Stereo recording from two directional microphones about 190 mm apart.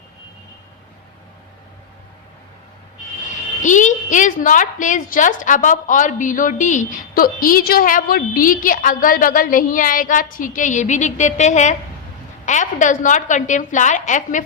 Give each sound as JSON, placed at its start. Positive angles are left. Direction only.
{"t": 3.6, "sound": "a woman's voice", "side_deg": 40}